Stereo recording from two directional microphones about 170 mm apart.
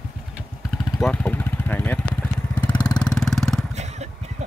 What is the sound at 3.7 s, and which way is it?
Motorcycle, 40° right (ahead or behind).